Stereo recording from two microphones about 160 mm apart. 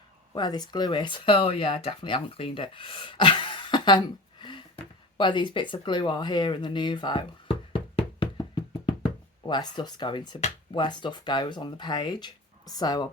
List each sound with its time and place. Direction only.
0.3 s speech: 25° left (ahead or behind)